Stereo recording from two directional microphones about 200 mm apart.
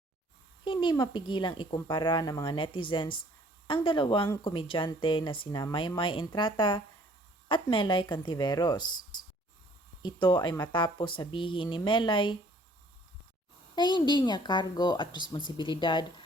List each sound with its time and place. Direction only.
0.6 s a woman's voice: 25° left (ahead or behind)
10.0 s a woman's voice: 20° left (ahead or behind)
13.7 s a woman's voice: 20° left (ahead or behind)